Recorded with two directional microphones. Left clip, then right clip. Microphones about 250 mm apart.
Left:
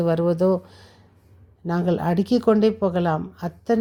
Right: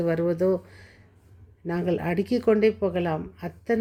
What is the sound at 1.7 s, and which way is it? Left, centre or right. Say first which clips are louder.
Speech: left 4 dB; left.